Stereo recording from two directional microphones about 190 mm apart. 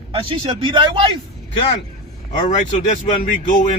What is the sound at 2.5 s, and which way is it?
Speech, 40° left (ahead or behind).